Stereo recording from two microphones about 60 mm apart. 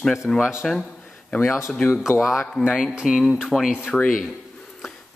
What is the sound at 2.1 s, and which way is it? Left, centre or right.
Speech, left.